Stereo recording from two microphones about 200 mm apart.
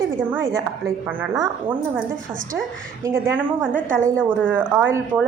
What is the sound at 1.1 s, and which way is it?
Speech, 15° right (ahead or behind).